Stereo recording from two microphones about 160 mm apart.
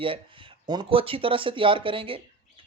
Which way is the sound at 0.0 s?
35° right (ahead or behind).